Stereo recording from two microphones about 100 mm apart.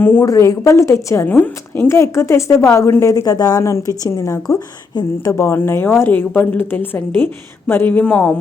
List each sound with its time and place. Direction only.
0.0 s a woman's voice: 20° left (ahead or behind)
0.3 s a woman's voice: 30° left (ahead or behind)
1.9 s a woman's voice: 30° left (ahead or behind)